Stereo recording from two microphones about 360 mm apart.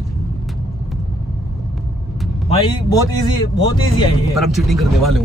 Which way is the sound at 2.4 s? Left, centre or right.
Centre.